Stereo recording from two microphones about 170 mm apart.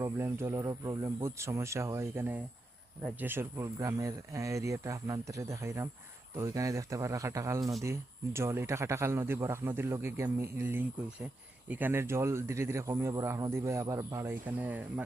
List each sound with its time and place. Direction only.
0.0 s speech: 15° right (ahead or behind)